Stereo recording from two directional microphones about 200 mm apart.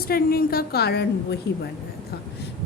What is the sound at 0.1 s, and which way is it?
A woman's voice, 50° left (ahead or behind).